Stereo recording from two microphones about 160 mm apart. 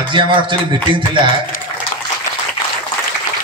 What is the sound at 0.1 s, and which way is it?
A man's voice, 30° right (ahead or behind).